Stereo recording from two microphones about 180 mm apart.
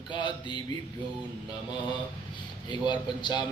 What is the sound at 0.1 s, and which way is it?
Speech, 25° left (ahead or behind).